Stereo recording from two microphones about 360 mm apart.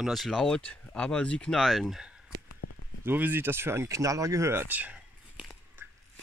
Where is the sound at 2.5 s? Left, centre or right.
Left.